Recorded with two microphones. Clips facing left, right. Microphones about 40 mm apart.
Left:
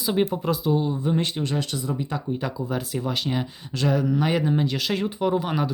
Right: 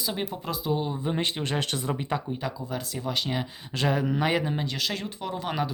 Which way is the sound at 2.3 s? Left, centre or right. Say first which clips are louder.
Left 4 dB; centre.